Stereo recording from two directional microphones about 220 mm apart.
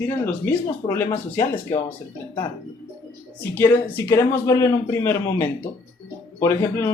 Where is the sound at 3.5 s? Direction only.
10° left (ahead or behind).